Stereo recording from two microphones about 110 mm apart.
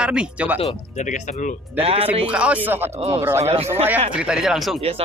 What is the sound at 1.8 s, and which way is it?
Speech, 65° right (ahead or behind).